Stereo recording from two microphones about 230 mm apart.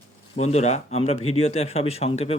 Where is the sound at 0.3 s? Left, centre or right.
Left.